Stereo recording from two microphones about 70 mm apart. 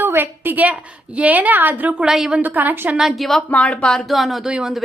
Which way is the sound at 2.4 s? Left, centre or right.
Right.